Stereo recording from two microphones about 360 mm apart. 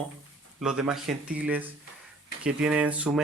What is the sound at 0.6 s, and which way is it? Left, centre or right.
Speech, centre.